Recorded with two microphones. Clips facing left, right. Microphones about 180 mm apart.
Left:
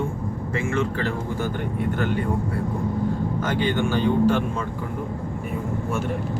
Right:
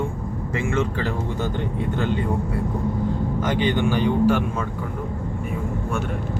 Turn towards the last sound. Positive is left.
turn(degrees=-10)  # may be behind; listen again after turning